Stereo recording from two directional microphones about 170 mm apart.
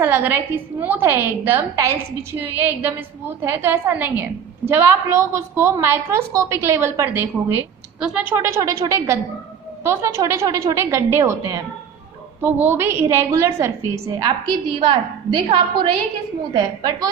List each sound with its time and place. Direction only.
0.0 s a woman's voice: 10° right (ahead or behind)
8.6 s a woman's voice: 20° right (ahead or behind)